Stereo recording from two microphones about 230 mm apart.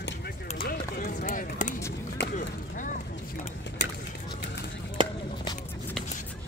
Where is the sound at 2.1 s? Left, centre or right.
Left.